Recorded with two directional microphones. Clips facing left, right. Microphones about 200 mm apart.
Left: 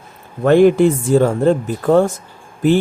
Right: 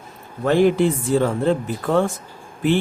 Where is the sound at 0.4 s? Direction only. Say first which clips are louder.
Left 6 dB; 55° left (ahead or behind).